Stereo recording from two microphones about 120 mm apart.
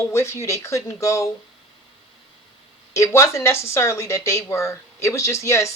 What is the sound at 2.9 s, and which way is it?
Speech, 25° left (ahead or behind).